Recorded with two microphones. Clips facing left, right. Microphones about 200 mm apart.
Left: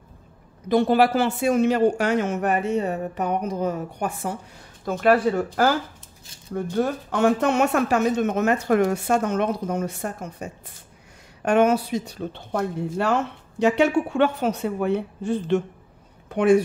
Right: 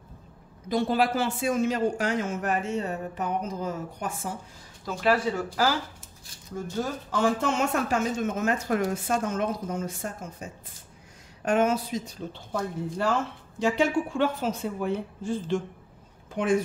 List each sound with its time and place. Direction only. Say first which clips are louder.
0.7 s speech: left 6 dB; 65° left (ahead or behind)